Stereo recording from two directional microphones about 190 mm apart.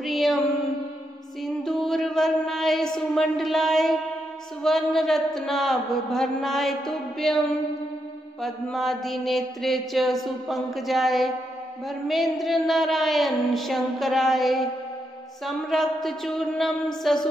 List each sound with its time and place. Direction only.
0.0 s music: centre (ahead or behind)
1.4 s a sound: centre (ahead or behind)
4.6 s mantra: centre (ahead or behind)